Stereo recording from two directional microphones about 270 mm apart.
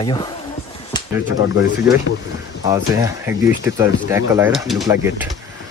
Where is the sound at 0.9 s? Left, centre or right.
Centre.